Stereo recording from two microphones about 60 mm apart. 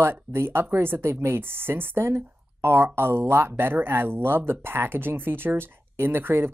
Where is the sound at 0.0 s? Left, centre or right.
Right.